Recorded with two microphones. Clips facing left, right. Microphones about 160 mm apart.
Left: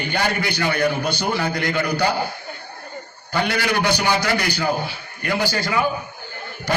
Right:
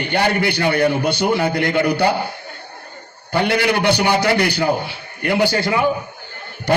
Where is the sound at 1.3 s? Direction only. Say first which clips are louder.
Right 4 dB; 25° right (ahead or behind).